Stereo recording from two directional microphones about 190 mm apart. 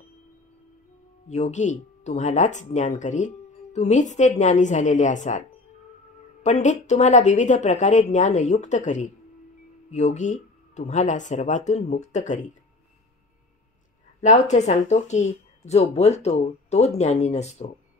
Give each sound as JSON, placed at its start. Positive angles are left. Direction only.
{"t": 1.3, "sound": "speech", "side_deg": 40}
{"t": 6.4, "sound": "speech", "side_deg": 40}
{"t": 14.2, "sound": "speech", "side_deg": 40}